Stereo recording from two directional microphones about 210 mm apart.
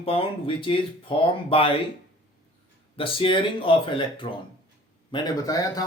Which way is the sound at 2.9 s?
25° left (ahead or behind).